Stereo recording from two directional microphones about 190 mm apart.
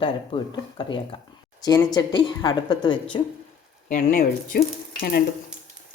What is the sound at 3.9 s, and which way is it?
Speech, 50° left (ahead or behind).